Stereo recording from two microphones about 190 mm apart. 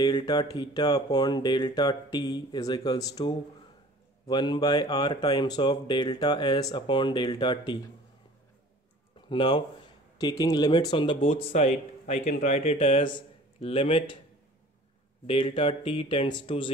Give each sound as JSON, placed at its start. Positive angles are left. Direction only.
{"t": 0.0, "sound": "speech", "side_deg": 25}
{"t": 9.3, "sound": "speech", "side_deg": 25}
{"t": 15.2, "sound": "speech", "side_deg": 25}